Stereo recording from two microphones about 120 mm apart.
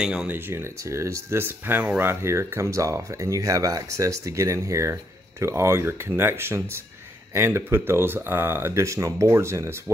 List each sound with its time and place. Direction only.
0.0 s speech: 5° right (ahead or behind)
0.3 s speech: 20° right (ahead or behind)